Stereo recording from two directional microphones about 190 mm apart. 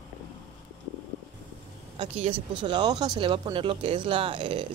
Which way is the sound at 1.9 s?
30° right (ahead or behind).